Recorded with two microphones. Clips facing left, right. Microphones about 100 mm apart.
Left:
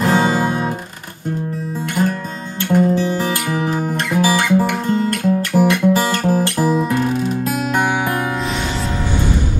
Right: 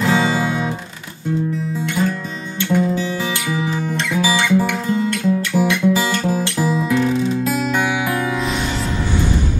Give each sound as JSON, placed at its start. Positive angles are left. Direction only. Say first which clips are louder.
{"t": 0.0, "sound": "music", "louder": "left 2 dB", "side_deg": 50}
{"t": 2.6, "sound": "music", "louder": "left 3 dB", "side_deg": 50}